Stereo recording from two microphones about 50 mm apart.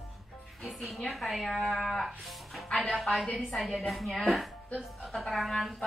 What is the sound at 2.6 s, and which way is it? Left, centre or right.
Speech, centre.